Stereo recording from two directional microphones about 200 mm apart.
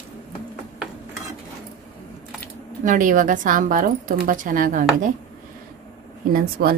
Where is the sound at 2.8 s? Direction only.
40° right (ahead or behind).